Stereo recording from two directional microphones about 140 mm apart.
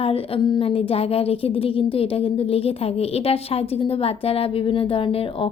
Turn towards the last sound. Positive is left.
turn(degrees=40)  # may be behind; listen again after turning